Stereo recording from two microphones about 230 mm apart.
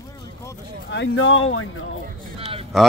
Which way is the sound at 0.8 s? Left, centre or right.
Left.